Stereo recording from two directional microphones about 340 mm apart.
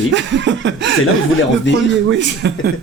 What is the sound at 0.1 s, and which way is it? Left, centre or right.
Chuckle, right.